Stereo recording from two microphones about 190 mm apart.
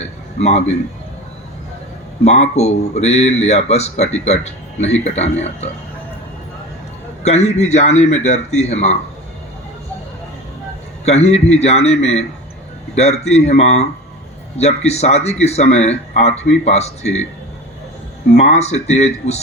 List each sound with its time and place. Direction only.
0.0 s a sound: 35° left (ahead or behind)
2.2 s speech: 35° left (ahead or behind)
7.2 s speech: 35° left (ahead or behind)
11.0 s speech: 35° left (ahead or behind)
18.3 s speech: 35° left (ahead or behind)